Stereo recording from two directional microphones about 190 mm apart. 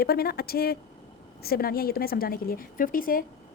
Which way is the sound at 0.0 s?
55° left (ahead or behind).